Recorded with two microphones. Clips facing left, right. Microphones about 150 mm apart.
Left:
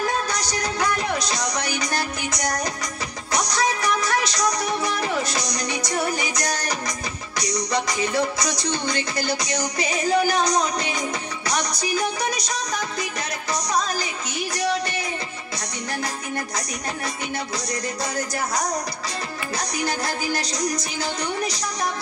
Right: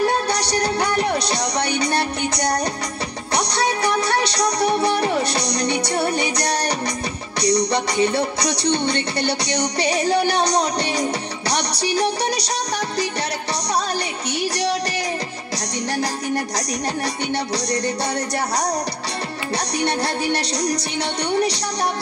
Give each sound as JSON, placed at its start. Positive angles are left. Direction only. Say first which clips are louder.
{"t": 0.4, "sound": "music", "louder": "right 6 dB", "side_deg": -70}
{"t": 0.7, "sound": "music", "louder": "right 4 dB", "side_deg": -30}
{"t": 3.4, "sound": "music", "louder": "right 1 dB", "side_deg": -65}
{"t": 4.6, "sound": "music", "louder": "right 6 dB", "side_deg": -30}
{"t": 7.5, "sound": "music", "louder": "right 4 dB", "side_deg": -35}
{"t": 8.4, "sound": "music", "louder": "right 5 dB", "side_deg": -70}
{"t": 10.1, "sound": "music", "louder": "left 1 dB", "side_deg": -35}
{"t": 11.5, "sound": "music", "louder": "right 3 dB", "side_deg": -75}
{"t": 19.8, "sound": "music", "louder": "right 4 dB", "side_deg": -35}
{"t": 20.6, "sound": "music", "louder": "right 3 dB", "side_deg": -70}